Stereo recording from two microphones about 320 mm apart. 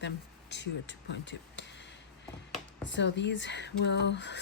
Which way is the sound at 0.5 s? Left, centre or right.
Left.